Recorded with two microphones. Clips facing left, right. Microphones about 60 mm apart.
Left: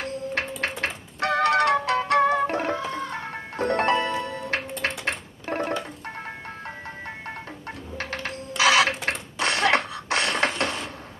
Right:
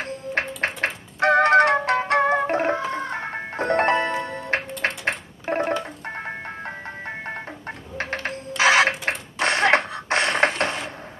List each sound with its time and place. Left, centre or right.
0.0 s music: right
4.8 s a sound: right
5.7 s music: right